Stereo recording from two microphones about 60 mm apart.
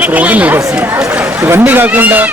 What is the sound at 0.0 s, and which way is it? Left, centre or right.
Speech, right.